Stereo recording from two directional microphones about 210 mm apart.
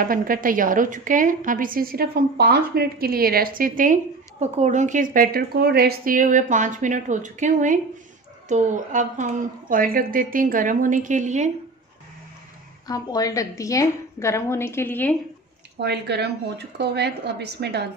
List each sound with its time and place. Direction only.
0.0 s a woman's voice: 40° right (ahead or behind)
12.8 s a woman's voice: 15° left (ahead or behind)
15.8 s a woman's voice: 50° right (ahead or behind)